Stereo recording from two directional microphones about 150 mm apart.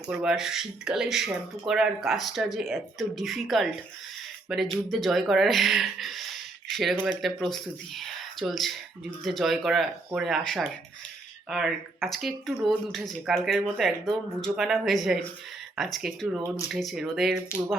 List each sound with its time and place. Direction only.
0.1 s speech: 5° right (ahead or behind)